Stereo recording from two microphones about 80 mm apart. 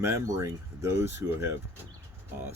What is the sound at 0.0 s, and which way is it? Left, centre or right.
Speech, right.